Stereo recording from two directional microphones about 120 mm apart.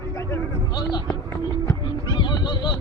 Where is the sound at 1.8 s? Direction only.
40° left (ahead or behind).